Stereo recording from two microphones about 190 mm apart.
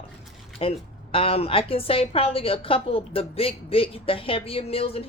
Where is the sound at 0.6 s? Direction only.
30° left (ahead or behind).